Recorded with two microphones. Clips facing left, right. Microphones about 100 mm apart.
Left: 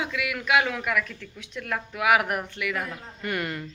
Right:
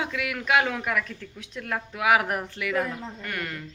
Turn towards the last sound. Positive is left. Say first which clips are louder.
# left 4 dB
turn(degrees=5)  # may be behind; listen again after turning